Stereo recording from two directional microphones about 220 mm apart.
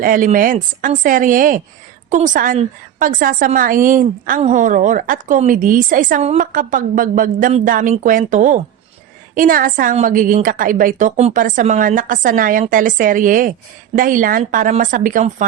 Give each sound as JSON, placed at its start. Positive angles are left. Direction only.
{"t": 0.0, "sound": "a woman's voice", "side_deg": -35}